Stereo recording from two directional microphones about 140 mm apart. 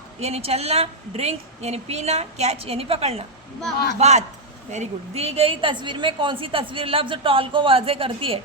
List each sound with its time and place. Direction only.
0.2 s a woman's voice: 50° right (ahead or behind)